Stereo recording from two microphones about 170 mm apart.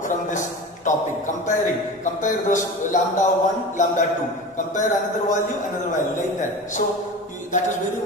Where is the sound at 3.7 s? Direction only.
50° left (ahead or behind).